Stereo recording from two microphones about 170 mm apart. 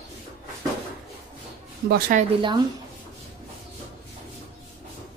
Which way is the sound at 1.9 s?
55° right (ahead or behind).